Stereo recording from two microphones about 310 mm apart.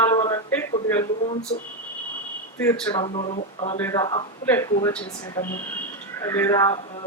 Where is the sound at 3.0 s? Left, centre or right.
Centre.